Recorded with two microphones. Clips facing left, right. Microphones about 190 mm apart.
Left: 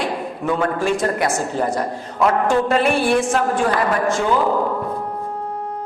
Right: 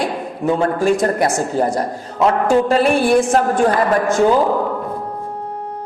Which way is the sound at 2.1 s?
25° right (ahead or behind).